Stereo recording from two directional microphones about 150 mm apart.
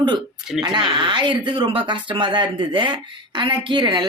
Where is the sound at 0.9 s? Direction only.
30° right (ahead or behind).